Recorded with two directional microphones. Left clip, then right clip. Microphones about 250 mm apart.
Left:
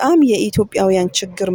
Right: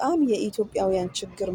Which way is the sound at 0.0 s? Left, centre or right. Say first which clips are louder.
Left 10 dB; left.